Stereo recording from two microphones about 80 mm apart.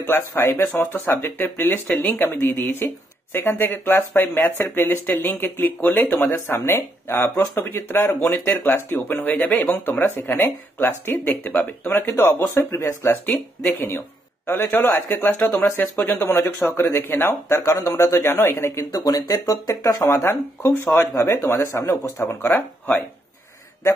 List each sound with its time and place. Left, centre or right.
0.0 s speech: left
12.4 s speech: left
18.5 s speech: left
20.6 s speech: left
21.5 s speech: left
22.3 s speech: left